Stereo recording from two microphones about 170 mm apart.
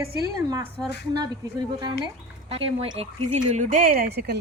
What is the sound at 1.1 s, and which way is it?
A woman's voice, 25° right (ahead or behind).